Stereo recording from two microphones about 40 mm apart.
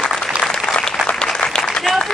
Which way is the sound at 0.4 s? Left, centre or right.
Left.